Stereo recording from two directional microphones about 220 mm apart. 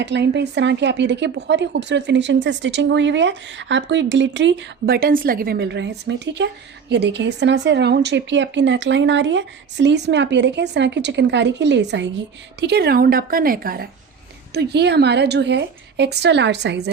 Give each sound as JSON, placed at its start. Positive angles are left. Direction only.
{"t": 0.0, "sound": "speech", "side_deg": -50}